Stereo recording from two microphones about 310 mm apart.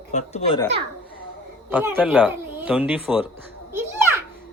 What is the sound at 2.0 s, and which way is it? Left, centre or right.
Speech, centre.